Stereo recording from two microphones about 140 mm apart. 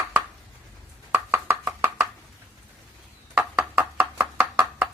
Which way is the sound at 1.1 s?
15° right (ahead or behind).